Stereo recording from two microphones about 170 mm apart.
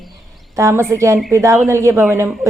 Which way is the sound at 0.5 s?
15° right (ahead or behind).